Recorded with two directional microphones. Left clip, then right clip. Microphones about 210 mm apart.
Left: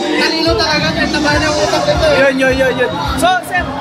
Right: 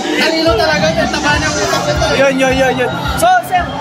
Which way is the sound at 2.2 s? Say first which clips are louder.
Even; 25° right (ahead or behind).